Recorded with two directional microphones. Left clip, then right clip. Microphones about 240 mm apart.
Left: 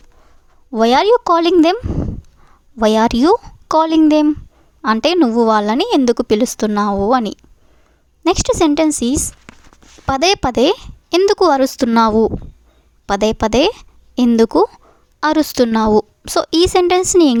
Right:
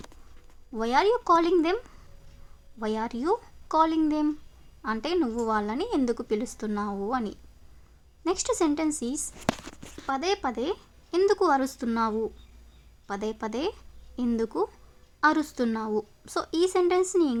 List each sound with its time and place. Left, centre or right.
0.7 s a woman's voice: left